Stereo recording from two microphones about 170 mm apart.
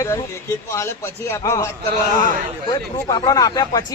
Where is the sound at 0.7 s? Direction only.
15° left (ahead or behind).